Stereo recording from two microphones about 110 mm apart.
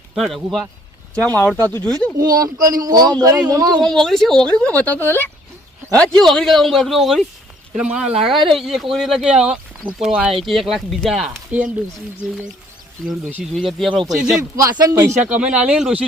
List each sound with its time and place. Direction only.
0.1 s speech: centre (ahead or behind)
1.2 s speech: 15° left (ahead or behind)
2.1 s speech: 35° right (ahead or behind)
3.8 s speech: 5° left (ahead or behind); by 5.3 s 20° left (ahead or behind)
5.9 s speech: 10° left (ahead or behind)
11.5 s speech: 15° right (ahead or behind)
13.0 s speech: 5° left (ahead or behind)
14.3 s speech: 30° right (ahead or behind); by 16.0 s 10° right (ahead or behind)